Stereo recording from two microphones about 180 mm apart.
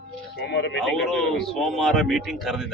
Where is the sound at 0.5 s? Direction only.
75° left (ahead or behind).